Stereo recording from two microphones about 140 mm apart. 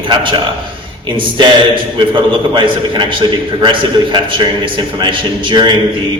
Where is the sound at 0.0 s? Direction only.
35° right (ahead or behind).